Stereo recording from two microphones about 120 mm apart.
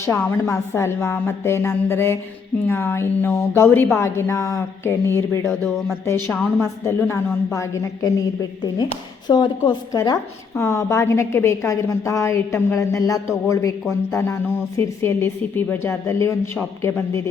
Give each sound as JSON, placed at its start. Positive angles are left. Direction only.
{"t": 0.0, "sound": "a woman's voice", "side_deg": 25}